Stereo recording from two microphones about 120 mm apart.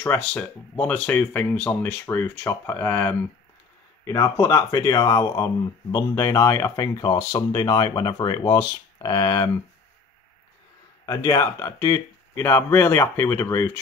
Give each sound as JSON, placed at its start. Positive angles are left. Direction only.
{"t": 0.0, "sound": "speech", "side_deg": 15}
{"t": 4.0, "sound": "speech", "side_deg": 30}
{"t": 11.1, "sound": "speech", "side_deg": 30}